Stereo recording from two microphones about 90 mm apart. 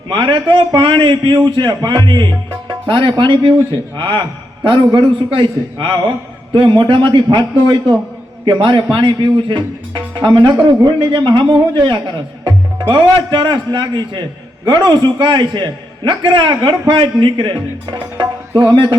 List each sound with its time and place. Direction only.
0.1 s a man's voice: 60° right (ahead or behind)